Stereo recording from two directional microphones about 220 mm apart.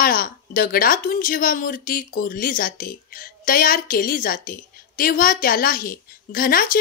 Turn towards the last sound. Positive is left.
turn(degrees=40)  # may be behind; listen again after turning